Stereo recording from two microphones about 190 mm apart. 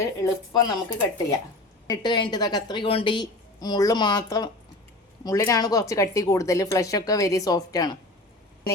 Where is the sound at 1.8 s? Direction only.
20° left (ahead or behind).